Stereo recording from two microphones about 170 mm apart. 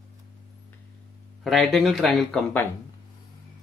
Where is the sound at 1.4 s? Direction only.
Centre (ahead or behind).